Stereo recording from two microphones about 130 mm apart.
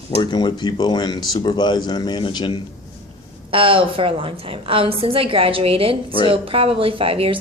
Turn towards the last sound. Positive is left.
turn(degrees=-45)  # may be behind; listen again after turning